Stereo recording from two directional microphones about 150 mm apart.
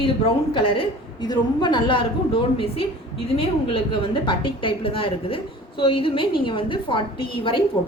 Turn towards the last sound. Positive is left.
turn(degrees=35)  # may be behind; listen again after turning